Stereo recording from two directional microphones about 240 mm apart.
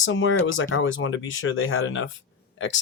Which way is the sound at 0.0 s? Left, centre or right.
Left.